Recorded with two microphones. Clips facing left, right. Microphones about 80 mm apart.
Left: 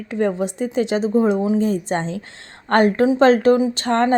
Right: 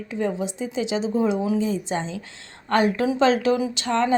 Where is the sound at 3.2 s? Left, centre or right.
Left.